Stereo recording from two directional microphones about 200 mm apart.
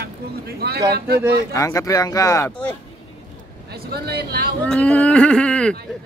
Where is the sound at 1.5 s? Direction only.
15° left (ahead or behind).